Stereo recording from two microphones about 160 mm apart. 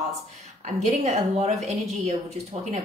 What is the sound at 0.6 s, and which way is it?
Speech, 45° right (ahead or behind).